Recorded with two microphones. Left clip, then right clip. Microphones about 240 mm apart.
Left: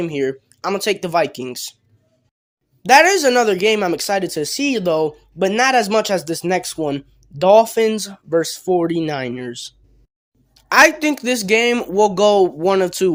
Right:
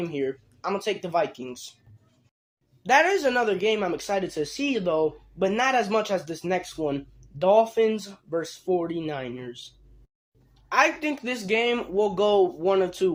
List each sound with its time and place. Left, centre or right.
0.0 s speech: left
2.8 s speech: left